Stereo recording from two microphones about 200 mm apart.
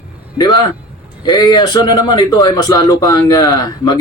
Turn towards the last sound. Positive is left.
turn(degrees=20)  # may be behind; listen again after turning